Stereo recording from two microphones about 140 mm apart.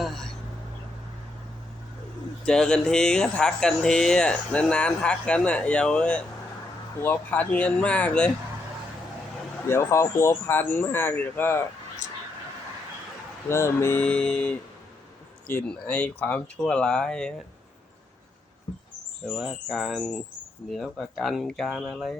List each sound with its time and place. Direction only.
0.0 s a sound: centre (ahead or behind)
2.4 s speech: 5° left (ahead or behind)
9.6 s speech: 20° left (ahead or behind)
13.5 s speech: 20° left (ahead or behind)
19.2 s speech: centre (ahead or behind)